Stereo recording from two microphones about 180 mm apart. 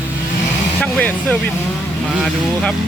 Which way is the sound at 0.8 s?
10° left (ahead or behind).